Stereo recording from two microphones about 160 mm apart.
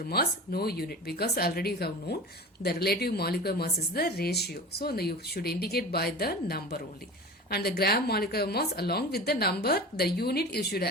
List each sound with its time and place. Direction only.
0.1 s speech: 75° left (ahead or behind)